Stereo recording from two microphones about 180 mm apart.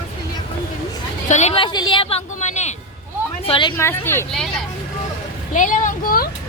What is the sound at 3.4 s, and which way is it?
Speech, 30° left (ahead or behind).